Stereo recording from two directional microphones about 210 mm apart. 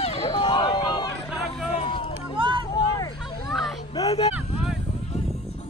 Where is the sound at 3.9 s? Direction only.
20° left (ahead or behind).